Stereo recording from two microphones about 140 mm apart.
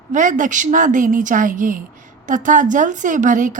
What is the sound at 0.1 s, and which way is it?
A woman's voice, 65° right (ahead or behind).